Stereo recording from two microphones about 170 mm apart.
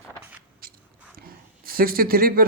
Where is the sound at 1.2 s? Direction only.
60° right (ahead or behind).